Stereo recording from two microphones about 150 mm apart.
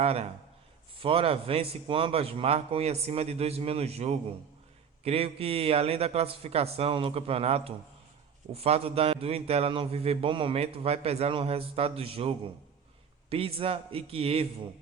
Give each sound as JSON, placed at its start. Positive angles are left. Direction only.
{"t": 0.0, "sound": "a man's voice", "side_deg": -45}